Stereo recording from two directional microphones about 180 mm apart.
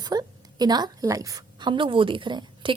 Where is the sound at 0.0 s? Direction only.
20° right (ahead or behind).